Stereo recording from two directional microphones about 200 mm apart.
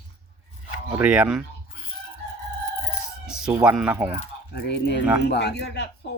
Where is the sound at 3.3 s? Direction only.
5° right (ahead or behind).